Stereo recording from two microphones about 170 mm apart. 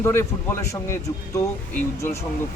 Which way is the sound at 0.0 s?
15° left (ahead or behind).